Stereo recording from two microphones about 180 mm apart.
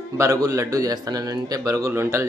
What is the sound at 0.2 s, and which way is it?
A man's voice, 20° right (ahead or behind).